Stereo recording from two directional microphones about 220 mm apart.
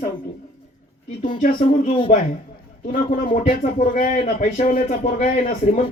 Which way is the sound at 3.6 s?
35° left (ahead or behind).